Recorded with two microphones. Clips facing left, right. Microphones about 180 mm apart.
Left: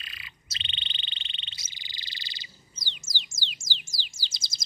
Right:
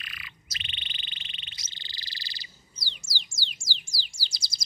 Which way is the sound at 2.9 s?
20° left (ahead or behind).